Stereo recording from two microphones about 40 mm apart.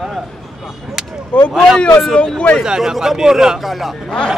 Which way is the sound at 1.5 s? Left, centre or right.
Centre.